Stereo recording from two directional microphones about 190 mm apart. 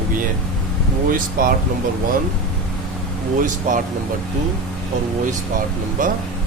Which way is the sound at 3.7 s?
40° right (ahead or behind).